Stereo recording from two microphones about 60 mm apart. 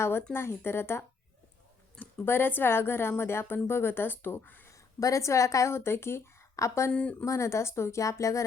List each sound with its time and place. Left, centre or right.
0.0 s speech: left
2.2 s speech: left
4.7 s a woman's voice: left
5.7 s speech: left
6.6 s a woman's voice: left
6.9 s speech: left
7.3 s a woman's voice: left